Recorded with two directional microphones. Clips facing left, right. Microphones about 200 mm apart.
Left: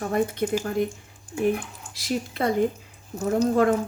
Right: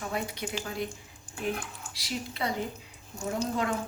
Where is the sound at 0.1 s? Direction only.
50° left (ahead or behind).